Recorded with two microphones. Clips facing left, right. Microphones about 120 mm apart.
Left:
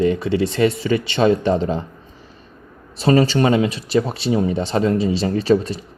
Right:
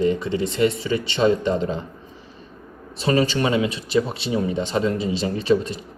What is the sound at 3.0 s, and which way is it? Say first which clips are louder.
Speech: left 5 dB; 40° left (ahead or behind).